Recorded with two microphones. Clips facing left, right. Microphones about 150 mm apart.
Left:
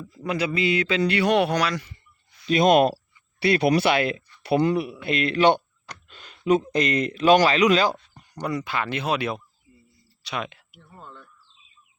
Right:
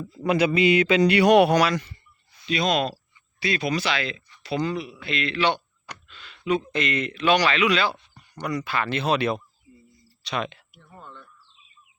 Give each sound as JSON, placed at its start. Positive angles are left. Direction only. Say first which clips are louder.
{"t": 0.3, "sound": "a man's voice", "louder": "right 4 dB", "side_deg": -20}
{"t": 2.5, "sound": "speech", "louder": "left 6 dB", "side_deg": 50}
{"t": 5.0, "sound": "speech", "louder": "left 5 dB", "side_deg": 45}
{"t": 8.4, "sound": "speech", "louder": "even", "side_deg": 25}
{"t": 11.0, "sound": "bird", "louder": "left 1 dB", "side_deg": 10}